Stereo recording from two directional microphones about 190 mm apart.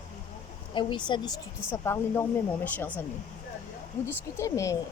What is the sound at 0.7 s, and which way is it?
Speech, 25° left (ahead or behind).